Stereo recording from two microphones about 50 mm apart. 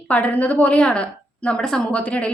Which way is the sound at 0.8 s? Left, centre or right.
Left.